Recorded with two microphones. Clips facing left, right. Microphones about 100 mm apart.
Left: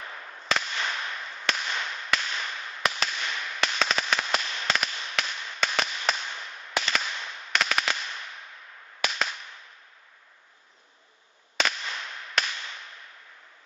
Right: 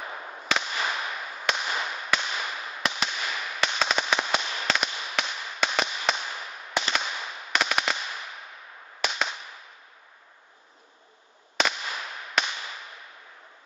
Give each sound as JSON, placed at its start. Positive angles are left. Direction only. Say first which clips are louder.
{"t": 0.0, "sound": "firecracker", "louder": "right 4 dB", "side_deg": -20}
{"t": 0.4, "sound": "firecracker", "louder": "even", "side_deg": 0}
{"t": 0.7, "sound": "fireworks", "louder": "right 2 dB", "side_deg": -10}
{"t": 1.7, "sound": "firecracker", "louder": "right 2 dB", "side_deg": -10}
{"t": 2.1, "sound": "whip", "louder": "right 1 dB", "side_deg": -10}
{"t": 4.6, "sound": "fireworks", "louder": "right 1 dB", "side_deg": 0}
{"t": 7.1, "sound": "firecracker", "louder": "right 1 dB", "side_deg": -10}
{"t": 11.5, "sound": "firecracker", "louder": "right 2 dB", "side_deg": -5}